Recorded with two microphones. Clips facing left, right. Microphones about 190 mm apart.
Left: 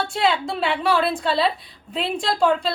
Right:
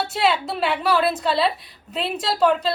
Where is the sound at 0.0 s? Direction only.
5° right (ahead or behind).